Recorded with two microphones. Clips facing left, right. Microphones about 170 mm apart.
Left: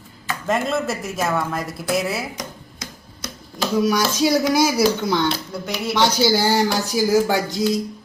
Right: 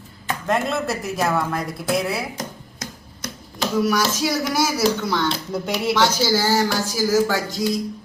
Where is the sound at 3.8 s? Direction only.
20° left (ahead or behind).